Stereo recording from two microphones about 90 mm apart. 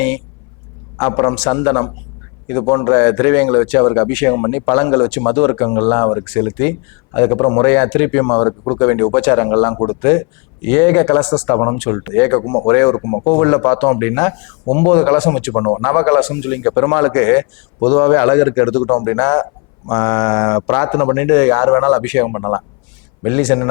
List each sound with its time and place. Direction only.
0.9 s speech: 25° left (ahead or behind)
4.4 s speech: 25° left (ahead or behind)
7.7 s speech: 15° left (ahead or behind); by 10.1 s 30° left (ahead or behind)
10.1 s speech: 15° left (ahead or behind)
11.5 s speech: 30° left (ahead or behind)
12.4 s speech: 35° left (ahead or behind)
12.6 s speech: 20° left (ahead or behind)
15.5 s speech: 30° left (ahead or behind)
18.8 s speech: 35° left (ahead or behind)
19.0 s speech: 20° left (ahead or behind)
22.3 s speech: 30° left (ahead or behind)
23.2 s speech: 15° left (ahead or behind)